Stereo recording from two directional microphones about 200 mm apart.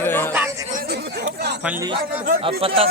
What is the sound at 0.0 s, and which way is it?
Chatter, 10° left (ahead or behind).